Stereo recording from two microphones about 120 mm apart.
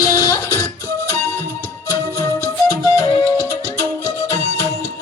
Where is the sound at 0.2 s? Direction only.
30° left (ahead or behind).